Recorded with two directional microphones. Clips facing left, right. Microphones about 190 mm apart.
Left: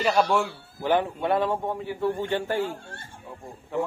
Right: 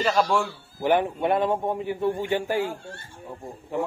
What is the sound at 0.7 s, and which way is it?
A man's voice, 15° right (ahead or behind).